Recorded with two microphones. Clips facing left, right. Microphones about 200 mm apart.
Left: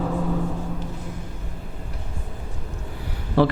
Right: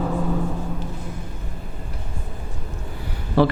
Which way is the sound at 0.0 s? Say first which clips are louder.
Right 1 dB; 30° right (ahead or behind).